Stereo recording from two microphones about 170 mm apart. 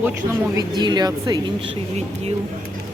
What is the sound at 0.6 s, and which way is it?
Speech, 25° right (ahead or behind).